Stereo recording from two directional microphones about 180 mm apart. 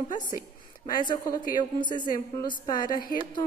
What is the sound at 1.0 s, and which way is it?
A woman's voice, 20° left (ahead or behind).